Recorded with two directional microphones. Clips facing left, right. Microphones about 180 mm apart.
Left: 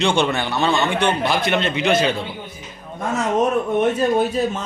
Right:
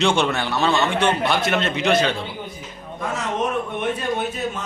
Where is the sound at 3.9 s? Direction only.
35° left (ahead or behind).